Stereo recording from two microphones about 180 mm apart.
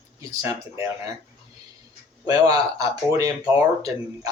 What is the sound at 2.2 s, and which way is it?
A man's voice, 20° right (ahead or behind).